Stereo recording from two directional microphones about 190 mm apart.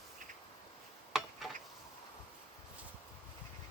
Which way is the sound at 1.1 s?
5° right (ahead or behind).